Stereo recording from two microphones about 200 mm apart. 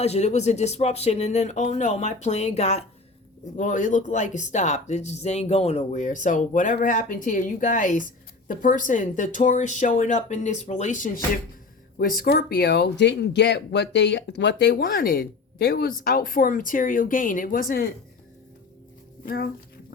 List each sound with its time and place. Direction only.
0.0 s speech: 35° left (ahead or behind)
19.2 s speech: 45° left (ahead or behind)